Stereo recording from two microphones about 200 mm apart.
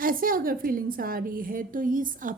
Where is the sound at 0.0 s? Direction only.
45° right (ahead or behind).